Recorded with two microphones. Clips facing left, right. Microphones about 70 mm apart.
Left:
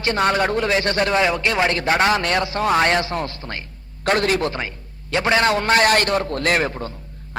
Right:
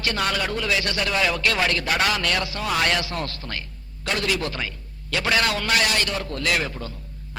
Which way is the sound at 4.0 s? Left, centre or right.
Left.